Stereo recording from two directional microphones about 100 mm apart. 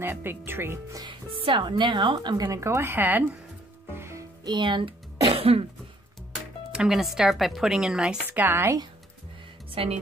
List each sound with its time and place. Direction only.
0.0 s a woman's voice: 20° right (ahead or behind)
0.9 s speech: 55° right (ahead or behind); by 2.6 s 40° right (ahead or behind)
2.6 s a woman's voice: 25° right (ahead or behind)
3.9 s music: 25° right (ahead or behind)
4.5 s speech: 50° right (ahead or behind)
5.3 s cough: 75° right (ahead or behind)
6.7 s speech: 5° right (ahead or behind); by 8.7 s 20° right (ahead or behind)
9.8 s a woman's voice: 65° right (ahead or behind)